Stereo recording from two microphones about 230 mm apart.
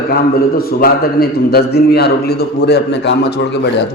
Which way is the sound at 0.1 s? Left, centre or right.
Left.